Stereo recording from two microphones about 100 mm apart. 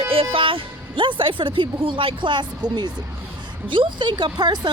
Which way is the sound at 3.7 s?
55° right (ahead or behind).